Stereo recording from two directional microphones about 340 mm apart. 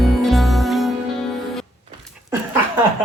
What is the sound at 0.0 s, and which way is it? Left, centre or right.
Music, centre.